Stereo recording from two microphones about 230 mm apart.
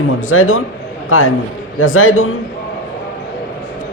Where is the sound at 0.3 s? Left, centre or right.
Left.